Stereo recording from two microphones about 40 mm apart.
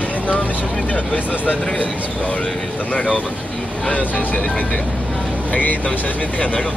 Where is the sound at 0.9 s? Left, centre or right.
Left.